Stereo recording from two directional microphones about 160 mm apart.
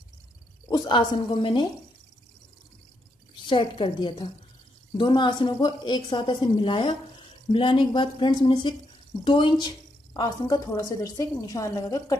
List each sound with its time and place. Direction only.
0.7 s a woman's voice: 25° left (ahead or behind)
3.4 s a woman's voice: 35° left (ahead or behind)